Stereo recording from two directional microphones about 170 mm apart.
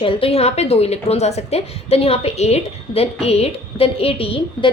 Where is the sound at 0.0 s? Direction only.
30° left (ahead or behind).